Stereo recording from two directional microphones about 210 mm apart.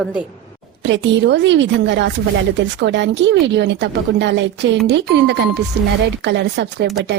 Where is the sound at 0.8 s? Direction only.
60° right (ahead or behind).